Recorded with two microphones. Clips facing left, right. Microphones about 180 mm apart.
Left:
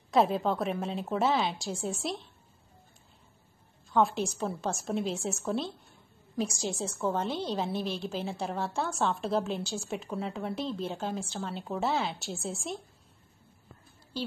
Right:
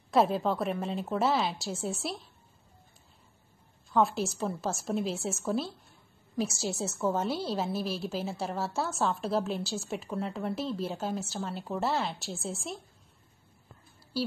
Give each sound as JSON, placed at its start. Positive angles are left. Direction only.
{"t": 0.1, "sound": "a woman's voice", "side_deg": 0}
{"t": 3.9, "sound": "a woman's voice", "side_deg": 0}
{"t": 14.1, "sound": "a woman's voice", "side_deg": -5}